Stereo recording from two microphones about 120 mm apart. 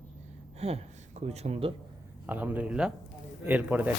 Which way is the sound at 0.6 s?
60° right (ahead or behind).